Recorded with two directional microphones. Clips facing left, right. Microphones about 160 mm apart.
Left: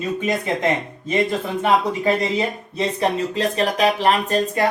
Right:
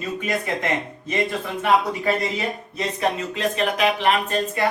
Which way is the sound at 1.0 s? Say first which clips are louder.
Left 5 dB; 25° left (ahead or behind).